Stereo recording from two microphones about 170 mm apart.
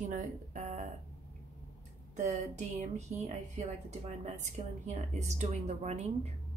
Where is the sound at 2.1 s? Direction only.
45° right (ahead or behind).